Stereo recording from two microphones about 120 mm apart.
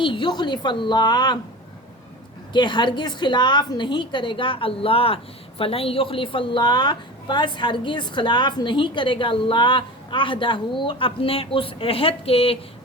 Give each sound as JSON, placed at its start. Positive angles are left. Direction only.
{"t": 0.0, "sound": "a woman's voice", "side_deg": 45}
{"t": 2.5, "sound": "a woman's voice", "side_deg": 40}